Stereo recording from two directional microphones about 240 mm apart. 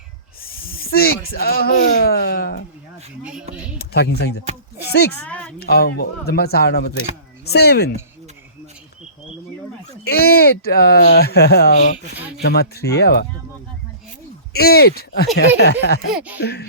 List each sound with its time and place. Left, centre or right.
0.4 s speech: left
3.5 s speech: centre
3.8 s speech: left
5.2 s a sound: centre
5.5 s speech: left
10.0 s speech: left
14.5 s speech: left
16.1 s speech: centre
16.4 s speech: left